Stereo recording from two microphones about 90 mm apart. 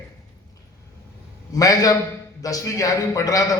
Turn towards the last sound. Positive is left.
turn(degrees=40)  # may be behind; listen again after turning